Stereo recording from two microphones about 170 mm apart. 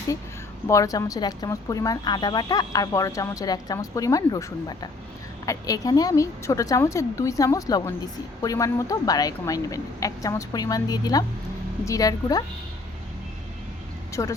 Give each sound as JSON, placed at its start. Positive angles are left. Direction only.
{"t": 0.7, "sound": "a woman's voice", "side_deg": 20}
{"t": 14.1, "sound": "speech", "side_deg": 20}